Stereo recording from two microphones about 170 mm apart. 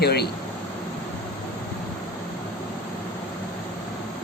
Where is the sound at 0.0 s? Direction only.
70° left (ahead or behind).